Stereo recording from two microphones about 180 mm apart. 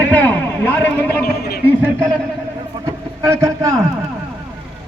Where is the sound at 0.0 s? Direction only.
10° left (ahead or behind).